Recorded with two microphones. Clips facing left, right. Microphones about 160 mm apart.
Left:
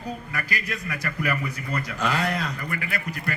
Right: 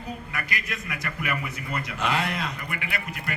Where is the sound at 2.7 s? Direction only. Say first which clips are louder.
Left 2 dB; 35° left (ahead or behind).